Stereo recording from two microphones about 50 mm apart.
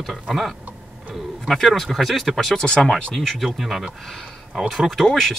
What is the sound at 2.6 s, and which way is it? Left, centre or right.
Speech, centre.